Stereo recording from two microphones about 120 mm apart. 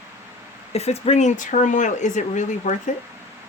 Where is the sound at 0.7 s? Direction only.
60° left (ahead or behind); by 2.7 s 90° left.